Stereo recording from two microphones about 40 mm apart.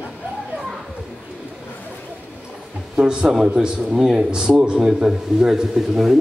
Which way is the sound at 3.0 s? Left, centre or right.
Right.